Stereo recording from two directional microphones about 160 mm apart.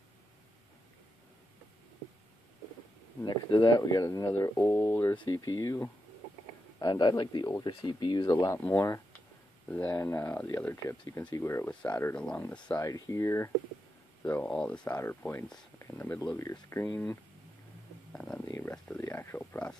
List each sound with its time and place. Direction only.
3.3 s speech: 25° left (ahead or behind)
5.1 s speech: 25° left (ahead or behind); by 17.2 s 5° left (ahead or behind)
18.1 s a sound: 5° left (ahead or behind)
18.6 s speech: 10° left (ahead or behind)